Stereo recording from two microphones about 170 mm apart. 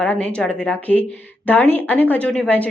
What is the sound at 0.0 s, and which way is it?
A woman's voice, 5° left (ahead or behind).